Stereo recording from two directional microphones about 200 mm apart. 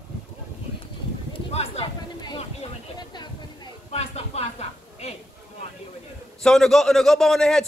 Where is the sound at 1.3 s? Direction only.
30° left (ahead or behind).